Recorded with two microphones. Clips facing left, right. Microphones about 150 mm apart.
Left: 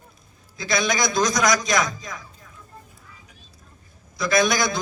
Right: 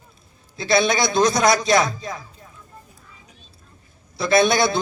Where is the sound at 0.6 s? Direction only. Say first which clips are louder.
Right 4 dB; 30° right (ahead or behind).